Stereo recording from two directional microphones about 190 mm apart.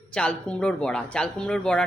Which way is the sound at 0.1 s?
5° left (ahead or behind).